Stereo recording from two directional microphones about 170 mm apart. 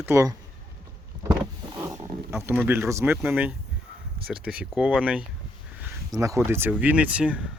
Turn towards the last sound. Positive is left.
turn(degrees=-5)  # may be behind; listen again after turning